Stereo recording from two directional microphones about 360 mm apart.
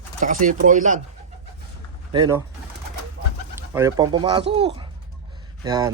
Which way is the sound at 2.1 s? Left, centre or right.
Centre.